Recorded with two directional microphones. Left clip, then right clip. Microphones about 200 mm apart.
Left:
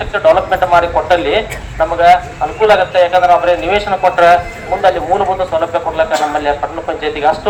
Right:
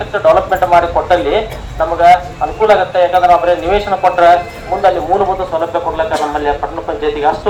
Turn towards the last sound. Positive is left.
turn(degrees=20)  # may be behind; listen again after turning